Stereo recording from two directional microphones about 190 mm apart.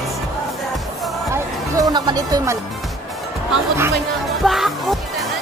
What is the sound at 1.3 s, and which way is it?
Music, 20° right (ahead or behind).